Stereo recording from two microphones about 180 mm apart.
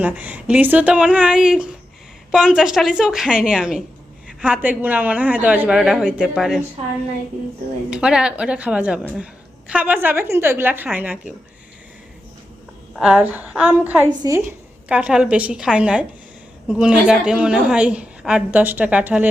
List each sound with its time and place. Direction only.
0.0 s a woman's voice: 10° right (ahead or behind)
7.9 s a woman's voice: 5° right (ahead or behind)
13.0 s a woman's voice: 5° right (ahead or behind)
14.1 s a woman's voice: 20° right (ahead or behind)
14.8 s a woman's voice: 5° right (ahead or behind)